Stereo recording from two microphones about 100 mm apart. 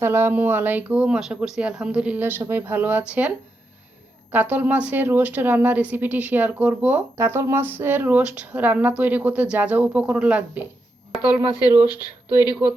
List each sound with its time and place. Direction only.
0.0 s speech: 20° right (ahead or behind)
4.3 s speech: 15° right (ahead or behind)
7.2 s speech: 25° right (ahead or behind)
11.1 s a sound: centre (ahead or behind)
11.9 s speech: 40° left (ahead or behind)